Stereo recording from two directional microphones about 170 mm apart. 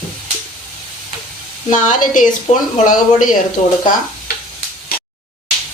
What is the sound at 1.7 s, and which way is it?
Speech, 45° left (ahead or behind).